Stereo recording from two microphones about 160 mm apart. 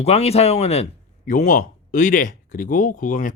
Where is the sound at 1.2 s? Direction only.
55° left (ahead or behind).